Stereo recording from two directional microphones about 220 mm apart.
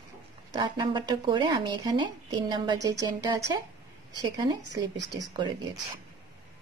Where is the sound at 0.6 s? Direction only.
20° right (ahead or behind).